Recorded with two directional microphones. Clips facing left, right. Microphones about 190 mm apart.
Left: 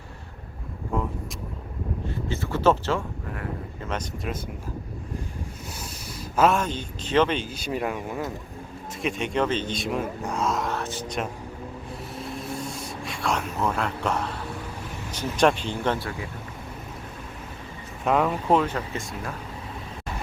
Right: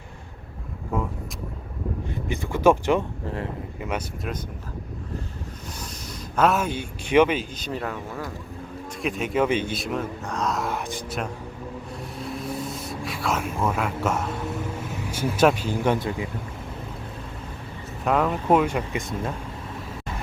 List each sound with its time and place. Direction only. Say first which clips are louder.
0.9 s vehicle: right 1 dB; 5° right (ahead or behind)
2.2 s a man's voice: right 3 dB; 15° right (ahead or behind)
6.3 s a man's voice: even; centre (ahead or behind)
7.5 s speech: left 2 dB; 10° left (ahead or behind)
9.0 s a man's voice: right 2 dB; centre (ahead or behind)
10.7 s a man's voice: even; 15° right (ahead or behind)
12.1 s a sound: right 2 dB; centre (ahead or behind)
15.1 s a man's voice: right 2 dB; 10° right (ahead or behind)
18.0 s a man's voice: even; centre (ahead or behind)